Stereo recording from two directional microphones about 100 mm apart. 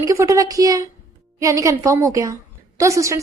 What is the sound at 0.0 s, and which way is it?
A woman's voice, 30° right (ahead or behind).